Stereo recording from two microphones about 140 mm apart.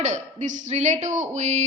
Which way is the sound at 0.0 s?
60° right (ahead or behind).